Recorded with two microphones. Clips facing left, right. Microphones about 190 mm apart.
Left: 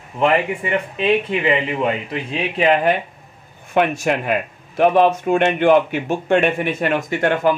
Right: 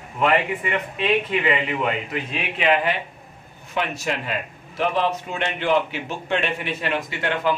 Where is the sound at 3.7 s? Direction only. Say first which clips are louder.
Left 8 dB; 55° left (ahead or behind).